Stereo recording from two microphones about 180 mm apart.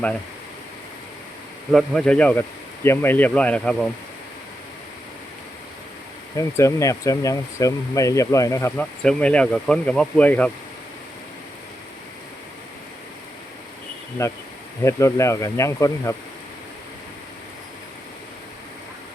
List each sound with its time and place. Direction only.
1.7 s speech: centre (ahead or behind)
6.3 s speech: 15° left (ahead or behind)
14.2 s speech: 15° left (ahead or behind)